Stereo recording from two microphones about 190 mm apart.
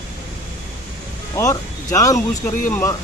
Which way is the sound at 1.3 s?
15° left (ahead or behind).